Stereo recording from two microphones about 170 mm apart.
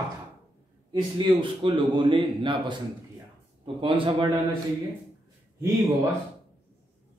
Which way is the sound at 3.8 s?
30° right (ahead or behind).